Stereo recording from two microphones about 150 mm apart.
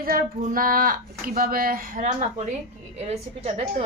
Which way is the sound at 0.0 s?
75° right (ahead or behind).